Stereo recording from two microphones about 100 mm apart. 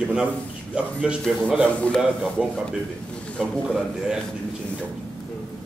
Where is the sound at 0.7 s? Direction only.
10° right (ahead or behind).